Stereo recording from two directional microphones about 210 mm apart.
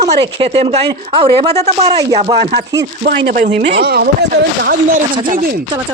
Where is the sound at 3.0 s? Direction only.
45° right (ahead or behind).